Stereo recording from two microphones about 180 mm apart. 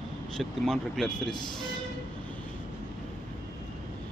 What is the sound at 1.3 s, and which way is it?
Speech, 25° left (ahead or behind).